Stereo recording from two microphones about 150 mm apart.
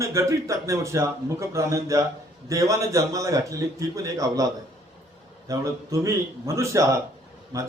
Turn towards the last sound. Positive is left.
turn(degrees=-20)  # may be behind; listen again after turning